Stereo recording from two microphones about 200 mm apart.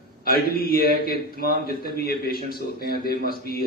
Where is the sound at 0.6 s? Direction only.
50° left (ahead or behind).